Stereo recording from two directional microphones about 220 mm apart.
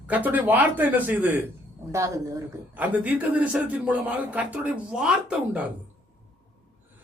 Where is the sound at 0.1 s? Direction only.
5° right (ahead or behind).